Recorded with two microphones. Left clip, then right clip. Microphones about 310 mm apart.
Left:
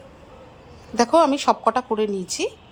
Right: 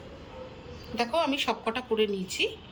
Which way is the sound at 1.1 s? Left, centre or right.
Centre.